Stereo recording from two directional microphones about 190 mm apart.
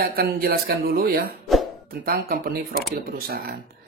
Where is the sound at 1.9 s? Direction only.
50° right (ahead or behind).